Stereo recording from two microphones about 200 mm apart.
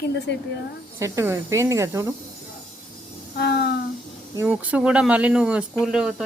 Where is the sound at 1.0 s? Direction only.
15° right (ahead or behind).